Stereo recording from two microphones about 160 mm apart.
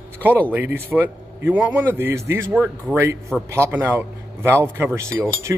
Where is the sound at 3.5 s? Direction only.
15° right (ahead or behind).